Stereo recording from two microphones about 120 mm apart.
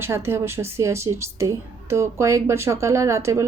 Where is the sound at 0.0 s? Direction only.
20° right (ahead or behind).